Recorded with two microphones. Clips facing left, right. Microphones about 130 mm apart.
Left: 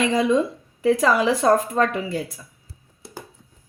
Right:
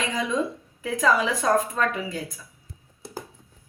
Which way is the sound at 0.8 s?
30° left (ahead or behind).